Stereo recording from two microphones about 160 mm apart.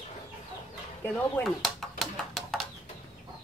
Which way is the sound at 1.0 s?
10° left (ahead or behind).